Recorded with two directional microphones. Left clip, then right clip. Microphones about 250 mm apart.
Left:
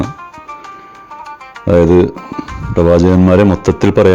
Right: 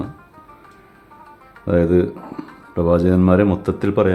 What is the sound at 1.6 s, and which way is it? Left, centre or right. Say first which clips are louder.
Speech: left 8 dB; left.